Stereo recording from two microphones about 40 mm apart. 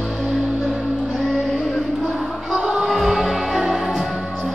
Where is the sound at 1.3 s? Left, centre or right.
Centre.